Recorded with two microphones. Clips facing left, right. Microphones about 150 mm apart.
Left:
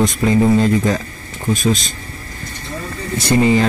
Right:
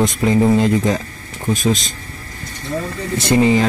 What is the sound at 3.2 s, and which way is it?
Speech, 20° right (ahead or behind).